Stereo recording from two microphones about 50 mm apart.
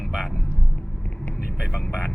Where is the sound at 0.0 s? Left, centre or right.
Centre.